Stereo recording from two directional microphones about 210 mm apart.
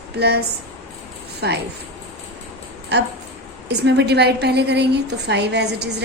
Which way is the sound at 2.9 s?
55° right (ahead or behind).